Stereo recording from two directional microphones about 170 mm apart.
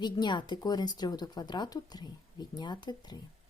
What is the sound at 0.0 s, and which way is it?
Speech, 25° left (ahead or behind).